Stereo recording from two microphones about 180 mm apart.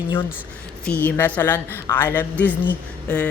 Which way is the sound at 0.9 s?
10° left (ahead or behind).